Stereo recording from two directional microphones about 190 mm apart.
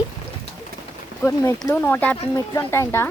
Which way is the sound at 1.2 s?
15° left (ahead or behind).